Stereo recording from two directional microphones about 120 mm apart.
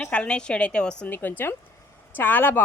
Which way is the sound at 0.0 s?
10° left (ahead or behind).